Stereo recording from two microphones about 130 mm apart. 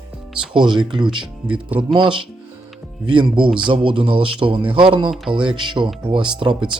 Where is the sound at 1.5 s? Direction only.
10° right (ahead or behind).